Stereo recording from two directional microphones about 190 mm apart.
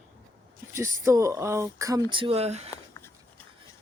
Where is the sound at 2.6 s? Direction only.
15° left (ahead or behind).